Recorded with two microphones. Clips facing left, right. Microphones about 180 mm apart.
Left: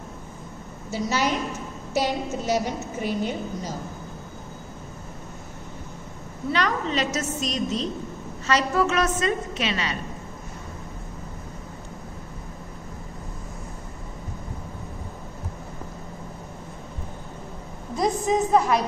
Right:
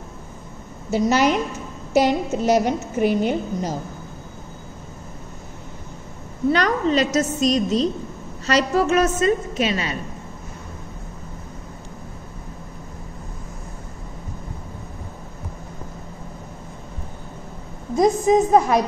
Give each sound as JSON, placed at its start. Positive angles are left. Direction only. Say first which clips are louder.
{"t": 0.9, "sound": "a woman's voice", "louder": "right 7 dB", "side_deg": -65}
{"t": 6.5, "sound": "a woman's voice", "louder": "right 5 dB", "side_deg": -40}
{"t": 17.9, "sound": "a woman's voice", "louder": "right 7 dB", "side_deg": -45}